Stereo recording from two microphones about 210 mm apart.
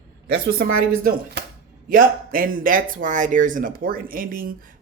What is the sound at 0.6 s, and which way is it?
Speech, 55° right (ahead or behind).